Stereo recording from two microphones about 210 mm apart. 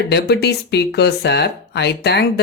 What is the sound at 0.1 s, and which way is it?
Speech, 50° left (ahead or behind).